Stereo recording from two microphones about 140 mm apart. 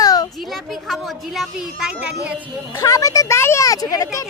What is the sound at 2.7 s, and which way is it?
Speech, 25° left (ahead or behind).